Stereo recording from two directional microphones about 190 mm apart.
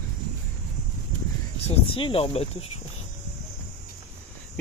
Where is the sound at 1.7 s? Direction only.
30° left (ahead or behind).